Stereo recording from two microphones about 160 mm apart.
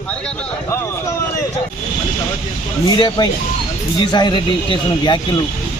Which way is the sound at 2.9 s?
25° left (ahead or behind).